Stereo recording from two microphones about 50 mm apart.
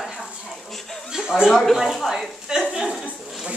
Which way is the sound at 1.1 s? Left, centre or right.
Centre.